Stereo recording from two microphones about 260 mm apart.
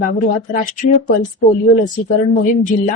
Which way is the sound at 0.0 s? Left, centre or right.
Left.